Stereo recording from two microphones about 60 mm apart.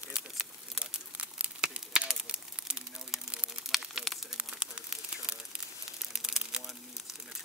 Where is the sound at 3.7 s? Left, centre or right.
Centre.